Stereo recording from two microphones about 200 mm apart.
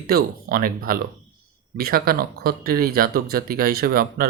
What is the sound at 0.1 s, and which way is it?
Speech, 45° right (ahead or behind).